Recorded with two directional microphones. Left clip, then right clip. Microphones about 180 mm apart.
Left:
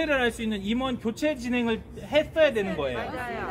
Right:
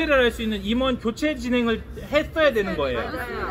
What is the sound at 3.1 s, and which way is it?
Speech, 5° right (ahead or behind).